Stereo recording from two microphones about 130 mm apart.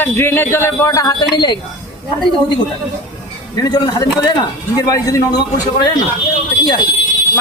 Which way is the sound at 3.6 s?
30° left (ahead or behind).